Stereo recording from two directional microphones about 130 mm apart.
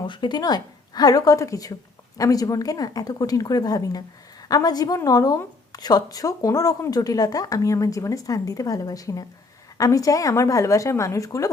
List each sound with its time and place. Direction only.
0.1 s speech: 35° left (ahead or behind)